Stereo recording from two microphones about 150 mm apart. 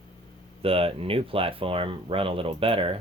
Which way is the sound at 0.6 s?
40° right (ahead or behind).